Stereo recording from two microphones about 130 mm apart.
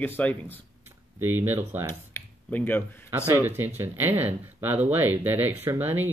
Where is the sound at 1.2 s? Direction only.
15° right (ahead or behind).